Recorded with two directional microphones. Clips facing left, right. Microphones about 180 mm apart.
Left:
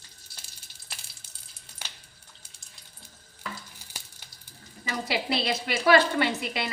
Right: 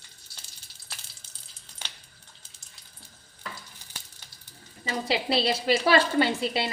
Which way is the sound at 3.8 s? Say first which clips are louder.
Left 1 dB; 10° left (ahead or behind).